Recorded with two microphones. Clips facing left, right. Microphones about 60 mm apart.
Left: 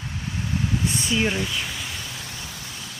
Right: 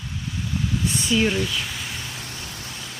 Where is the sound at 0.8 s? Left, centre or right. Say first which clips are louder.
Right 5 dB; left.